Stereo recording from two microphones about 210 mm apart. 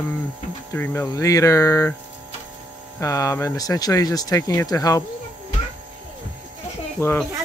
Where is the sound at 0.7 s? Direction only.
10° left (ahead or behind).